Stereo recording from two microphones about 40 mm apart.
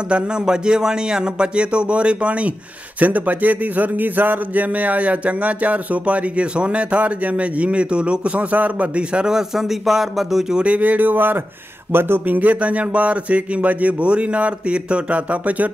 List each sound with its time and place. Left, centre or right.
0.1 s speech: right
3.0 s speech: right
9.3 s speech: centre
10.6 s speech: right
11.9 s speech: right
12.3 s speech: right